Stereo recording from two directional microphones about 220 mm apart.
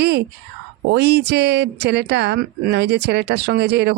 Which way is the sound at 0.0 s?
50° right (ahead or behind).